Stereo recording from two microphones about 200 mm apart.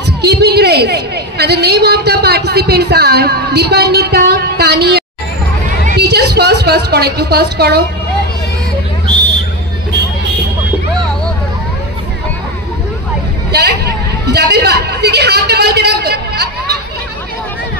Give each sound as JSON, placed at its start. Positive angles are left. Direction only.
{"t": 0.2, "sound": "a woman's voice", "side_deg": -55}
{"t": 13.5, "sound": "a man's voice", "side_deg": -55}